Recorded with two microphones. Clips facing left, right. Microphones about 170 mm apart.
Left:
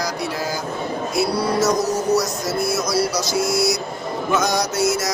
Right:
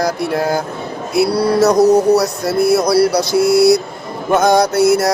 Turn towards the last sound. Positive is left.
turn(degrees=-60)  # may be behind; listen again after turning